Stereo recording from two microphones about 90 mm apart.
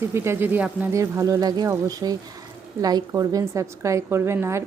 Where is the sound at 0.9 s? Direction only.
35° right (ahead or behind).